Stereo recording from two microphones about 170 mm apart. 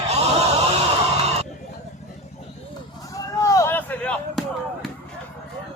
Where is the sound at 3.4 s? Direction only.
20° left (ahead or behind).